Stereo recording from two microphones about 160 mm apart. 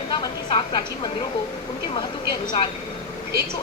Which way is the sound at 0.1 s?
30° left (ahead or behind).